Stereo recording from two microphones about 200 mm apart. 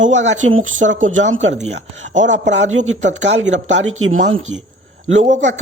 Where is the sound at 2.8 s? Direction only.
65° right (ahead or behind).